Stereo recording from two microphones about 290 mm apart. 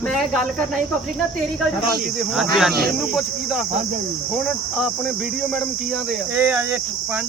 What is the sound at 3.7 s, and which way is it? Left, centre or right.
Speech, right.